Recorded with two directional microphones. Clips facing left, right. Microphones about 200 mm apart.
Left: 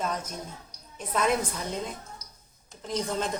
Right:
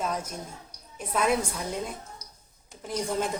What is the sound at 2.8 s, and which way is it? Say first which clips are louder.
Speech: right 1 dB; 10° right (ahead or behind).